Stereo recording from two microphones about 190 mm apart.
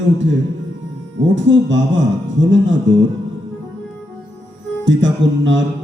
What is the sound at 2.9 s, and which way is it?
Speech, 75° right (ahead or behind).